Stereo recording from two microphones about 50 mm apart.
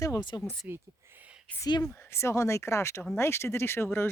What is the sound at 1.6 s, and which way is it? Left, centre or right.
Speech, left.